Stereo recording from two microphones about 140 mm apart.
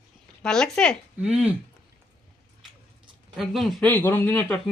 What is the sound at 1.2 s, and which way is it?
Speech, 10° right (ahead or behind).